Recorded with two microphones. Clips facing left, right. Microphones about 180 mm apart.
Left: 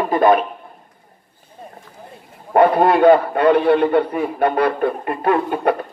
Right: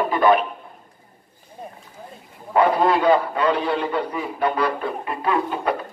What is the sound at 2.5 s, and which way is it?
A man's voice, 55° left (ahead or behind).